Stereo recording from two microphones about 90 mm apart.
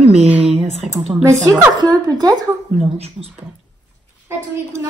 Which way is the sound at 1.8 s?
45° right (ahead or behind).